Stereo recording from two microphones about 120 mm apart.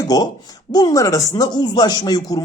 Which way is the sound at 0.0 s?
35° left (ahead or behind).